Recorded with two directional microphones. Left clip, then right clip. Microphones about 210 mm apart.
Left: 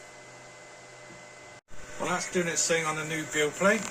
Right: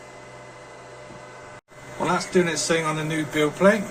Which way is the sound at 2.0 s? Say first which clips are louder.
Right 7 dB; 10° left (ahead or behind).